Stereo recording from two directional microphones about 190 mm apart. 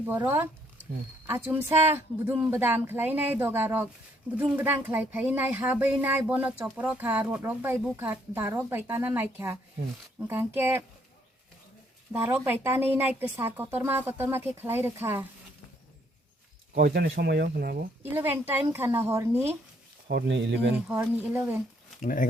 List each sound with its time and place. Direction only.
0.0 s speech: 10° right (ahead or behind)
12.1 s speech: 10° right (ahead or behind)
16.7 s speech: 55° right (ahead or behind)
18.0 s speech: 10° right (ahead or behind)
20.1 s speech: 65° right (ahead or behind)
20.7 s speech: 10° right (ahead or behind)
22.0 s speech: 45° left (ahead or behind)